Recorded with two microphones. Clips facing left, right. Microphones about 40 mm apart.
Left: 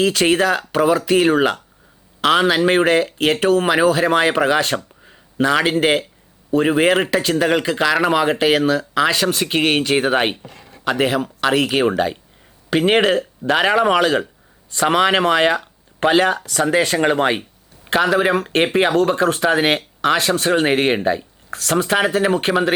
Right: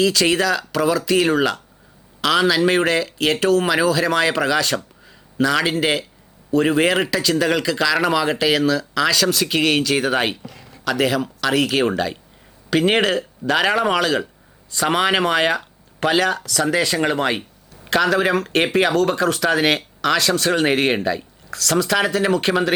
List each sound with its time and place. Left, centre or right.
0.0 s speech: left
5.0 s a sound: left
5.6 s speech: left
12.7 s speech: centre; by 22.5 s left